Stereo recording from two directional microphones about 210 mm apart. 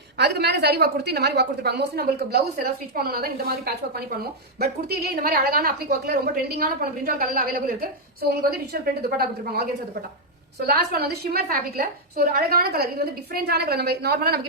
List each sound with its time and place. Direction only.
0.2 s a woman's voice: 50° right (ahead or behind)
10.7 s a woman's voice: 50° right (ahead or behind)